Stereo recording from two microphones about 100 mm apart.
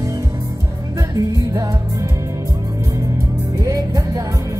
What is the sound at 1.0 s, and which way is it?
Music, 35° right (ahead or behind).